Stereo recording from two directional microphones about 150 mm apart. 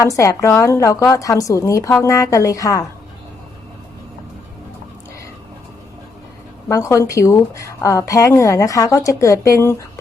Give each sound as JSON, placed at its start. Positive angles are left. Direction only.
{"t": 0.0, "sound": "a woman's voice", "side_deg": 20}
{"t": 6.7, "sound": "a woman's voice", "side_deg": 20}